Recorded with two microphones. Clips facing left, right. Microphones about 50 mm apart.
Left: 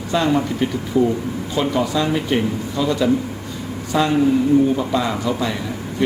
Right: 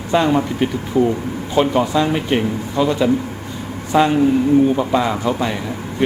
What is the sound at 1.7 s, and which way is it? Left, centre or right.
A man's voice, right.